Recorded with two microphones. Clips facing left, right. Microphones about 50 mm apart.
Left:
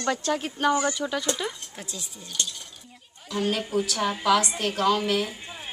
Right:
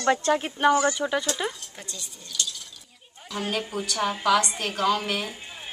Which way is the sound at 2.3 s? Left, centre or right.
Left.